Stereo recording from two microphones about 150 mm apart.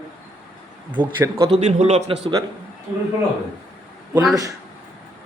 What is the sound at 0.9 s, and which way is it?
A man's voice, 30° right (ahead or behind).